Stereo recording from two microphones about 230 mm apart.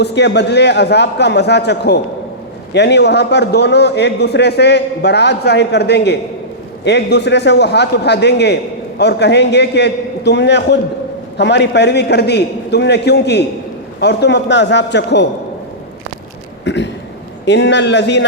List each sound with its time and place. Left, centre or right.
0.0 s a man's voice: left
16.6 s a man's voice: left